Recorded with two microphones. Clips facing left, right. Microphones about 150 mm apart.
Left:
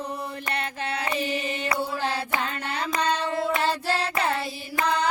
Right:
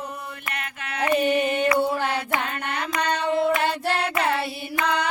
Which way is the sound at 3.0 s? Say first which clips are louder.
Even; 60° right (ahead or behind).